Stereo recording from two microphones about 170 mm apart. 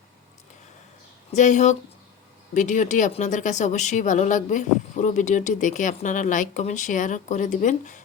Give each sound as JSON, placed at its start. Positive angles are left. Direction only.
{"t": 1.3, "sound": "speech", "side_deg": 45}